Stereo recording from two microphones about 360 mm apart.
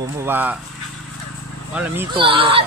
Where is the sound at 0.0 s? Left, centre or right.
Centre.